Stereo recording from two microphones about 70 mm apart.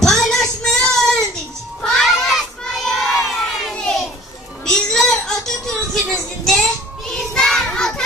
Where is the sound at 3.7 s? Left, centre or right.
Centre.